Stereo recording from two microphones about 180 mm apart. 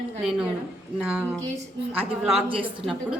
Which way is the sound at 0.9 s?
5° right (ahead or behind).